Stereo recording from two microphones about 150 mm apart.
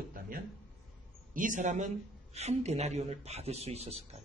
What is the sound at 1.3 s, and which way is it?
A man's voice, 60° right (ahead or behind).